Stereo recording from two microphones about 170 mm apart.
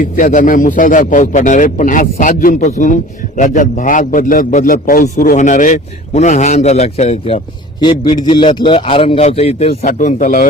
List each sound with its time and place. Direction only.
0.0 s a man's voice: 50° left (ahead or behind)
7.8 s a man's voice: 25° left (ahead or behind); by 10.4 s 50° left (ahead or behind)